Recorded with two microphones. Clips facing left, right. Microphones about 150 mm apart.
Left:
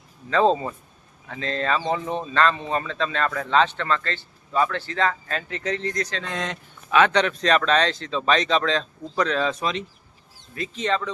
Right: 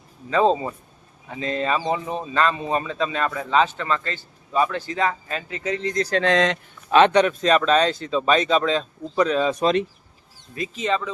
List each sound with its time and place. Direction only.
0.3 s speech: 10° right (ahead or behind)
6.2 s speech: 90° right
7.1 s speech: 10° right (ahead or behind)
10.8 s speech: 5° right (ahead or behind)